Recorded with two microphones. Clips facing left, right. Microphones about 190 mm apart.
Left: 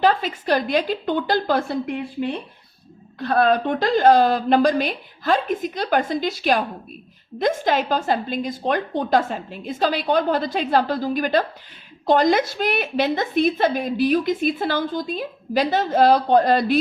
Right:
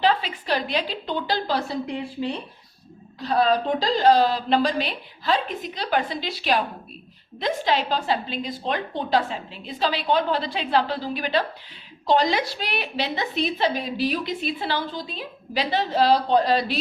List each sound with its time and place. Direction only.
0.0 s a woman's voice: 45° left (ahead or behind)